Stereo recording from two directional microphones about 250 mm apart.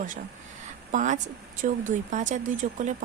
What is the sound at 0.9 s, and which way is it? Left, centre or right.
Speech, right.